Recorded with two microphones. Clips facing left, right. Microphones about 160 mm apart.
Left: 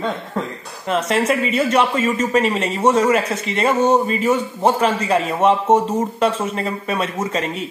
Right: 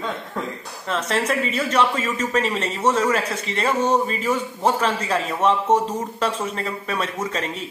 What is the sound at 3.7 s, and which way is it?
Speech, 30° left (ahead or behind).